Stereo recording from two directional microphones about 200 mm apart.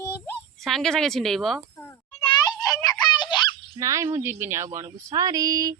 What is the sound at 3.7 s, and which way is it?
Speech, 15° right (ahead or behind).